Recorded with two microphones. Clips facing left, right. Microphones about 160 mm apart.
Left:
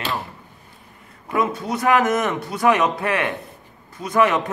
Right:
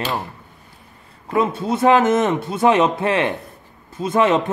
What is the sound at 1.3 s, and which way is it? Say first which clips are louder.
A man's voice: right 3 dB; 30° right (ahead or behind).